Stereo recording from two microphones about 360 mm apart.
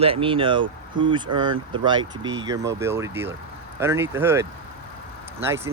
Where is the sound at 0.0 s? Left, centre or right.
Centre.